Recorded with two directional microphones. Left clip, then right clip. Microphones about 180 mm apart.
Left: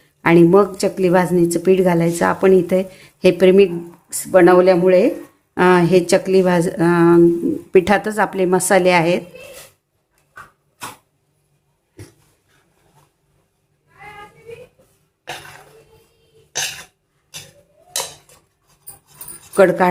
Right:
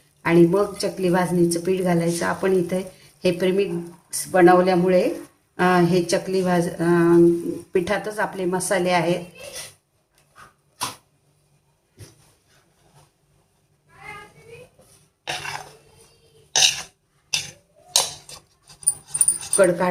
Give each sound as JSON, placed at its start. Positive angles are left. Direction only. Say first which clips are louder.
{"t": 0.3, "sound": "a woman's voice", "louder": "left 6 dB", "side_deg": 60}
{"t": 19.5, "sound": "a woman's voice", "louder": "left 5 dB", "side_deg": 60}